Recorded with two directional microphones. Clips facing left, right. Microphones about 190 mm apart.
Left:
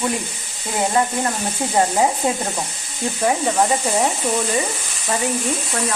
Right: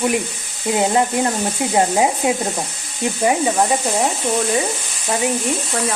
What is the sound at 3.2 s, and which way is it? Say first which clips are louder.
Speech: right 1 dB; 5° right (ahead or behind).